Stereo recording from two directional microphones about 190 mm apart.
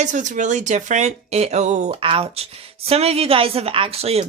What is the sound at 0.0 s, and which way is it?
Speech, 40° right (ahead or behind).